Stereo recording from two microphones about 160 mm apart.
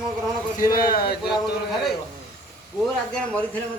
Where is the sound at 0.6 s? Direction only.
20° left (ahead or behind).